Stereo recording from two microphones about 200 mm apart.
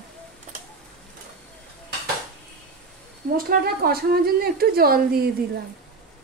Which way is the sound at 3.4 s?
50° right (ahead or behind).